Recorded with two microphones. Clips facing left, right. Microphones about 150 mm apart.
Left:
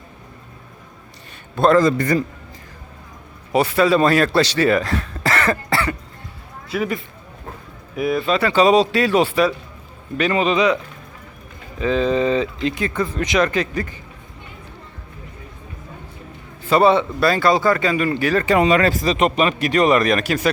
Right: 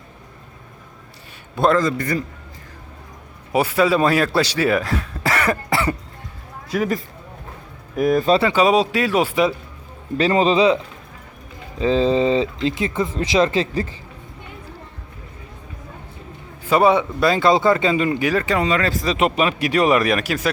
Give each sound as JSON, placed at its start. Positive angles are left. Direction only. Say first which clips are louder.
{"t": 1.6, "sound": "speech", "louder": "left 2 dB", "side_deg": -10}
{"t": 3.5, "sound": "speech", "louder": "left 1 dB", "side_deg": -10}
{"t": 6.7, "sound": "speech", "louder": "right 2 dB", "side_deg": -40}
{"t": 8.5, "sound": "speech", "louder": "left 2 dB", "side_deg": -5}
{"t": 10.2, "sound": "speech", "louder": "right 2 dB", "side_deg": -30}
{"t": 11.8, "sound": "speech", "louder": "right 1 dB", "side_deg": -25}
{"t": 16.6, "sound": "speech", "louder": "left 1 dB", "side_deg": -10}
{"t": 18.6, "sound": "speech", "louder": "left 4 dB", "side_deg": 15}
{"t": 19.0, "sound": "speech", "louder": "left 1 dB", "side_deg": -5}